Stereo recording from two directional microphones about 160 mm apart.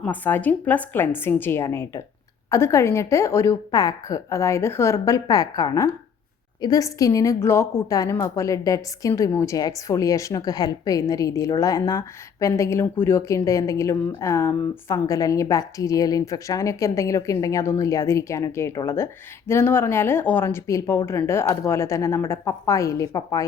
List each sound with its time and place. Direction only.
0.0 s a woman's voice: 10° left (ahead or behind)